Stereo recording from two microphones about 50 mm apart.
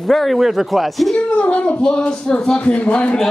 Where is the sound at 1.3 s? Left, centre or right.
Left.